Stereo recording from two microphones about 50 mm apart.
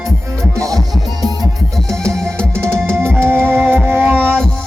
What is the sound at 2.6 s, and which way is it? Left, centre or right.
Music, right.